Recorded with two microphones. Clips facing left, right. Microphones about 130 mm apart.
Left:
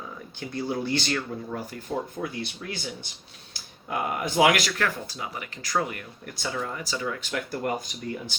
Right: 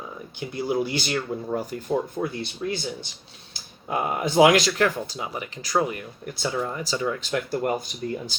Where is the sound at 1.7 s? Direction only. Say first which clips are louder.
Right 5 dB; 25° right (ahead or behind).